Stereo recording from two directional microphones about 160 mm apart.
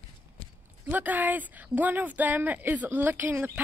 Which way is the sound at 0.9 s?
10° right (ahead or behind).